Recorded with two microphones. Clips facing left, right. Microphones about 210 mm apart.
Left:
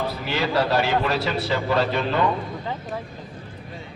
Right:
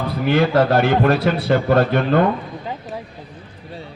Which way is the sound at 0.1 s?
55° right (ahead or behind).